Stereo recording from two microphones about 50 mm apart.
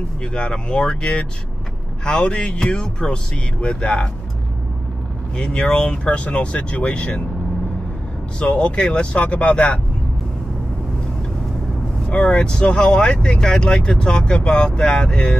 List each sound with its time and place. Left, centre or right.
0.2 s speech: centre
5.3 s speech: centre
8.4 s speech: left
12.1 s speech: left